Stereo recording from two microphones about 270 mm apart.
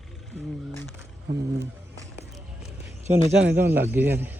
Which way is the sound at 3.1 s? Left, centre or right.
Centre.